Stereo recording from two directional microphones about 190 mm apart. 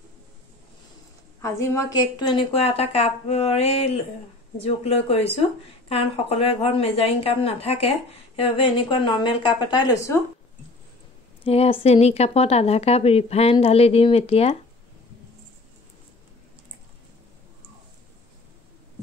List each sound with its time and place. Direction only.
1.4 s a woman's voice: 15° left (ahead or behind)
11.4 s a woman's voice: 30° left (ahead or behind)